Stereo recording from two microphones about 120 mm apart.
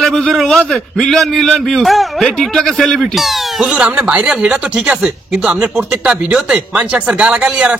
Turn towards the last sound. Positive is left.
turn(degrees=-5)  # may be behind; listen again after turning